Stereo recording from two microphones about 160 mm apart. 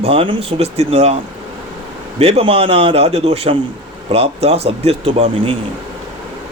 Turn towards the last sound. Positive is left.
turn(degrees=-35)  # may be behind; listen again after turning